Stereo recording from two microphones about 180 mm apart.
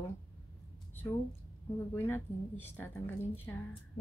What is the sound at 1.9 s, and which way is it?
A woman's voice, 15° left (ahead or behind).